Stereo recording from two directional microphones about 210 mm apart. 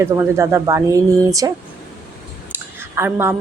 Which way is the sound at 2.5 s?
10° right (ahead or behind).